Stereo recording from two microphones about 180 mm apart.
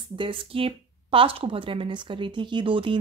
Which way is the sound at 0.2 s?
30° right (ahead or behind).